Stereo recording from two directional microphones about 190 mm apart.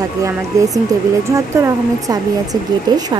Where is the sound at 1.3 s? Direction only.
15° right (ahead or behind).